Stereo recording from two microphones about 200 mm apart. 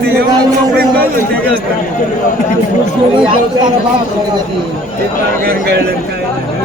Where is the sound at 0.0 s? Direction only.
55° right (ahead or behind).